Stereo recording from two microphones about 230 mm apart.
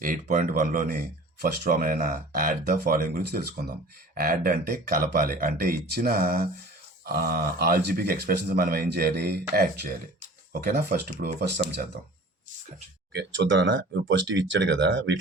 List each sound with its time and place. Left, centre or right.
0.0 s speech: right
13.1 s speech: right